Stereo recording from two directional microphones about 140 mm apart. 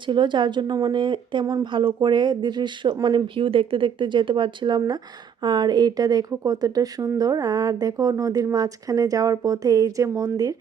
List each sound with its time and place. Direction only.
0.1 s a woman's voice: 35° right (ahead or behind)